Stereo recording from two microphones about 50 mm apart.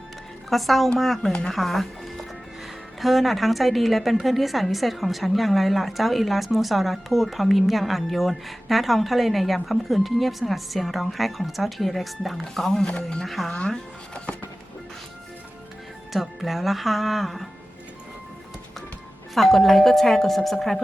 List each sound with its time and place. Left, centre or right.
0.5 s a woman's voice: centre
1.3 s speech: centre
1.5 s a woman's voice: centre
12.8 s speech: centre
13.2 s a woman's voice: centre
13.5 s speech: centre
16.1 s a woman's voice: centre
19.3 s a woman's voice: centre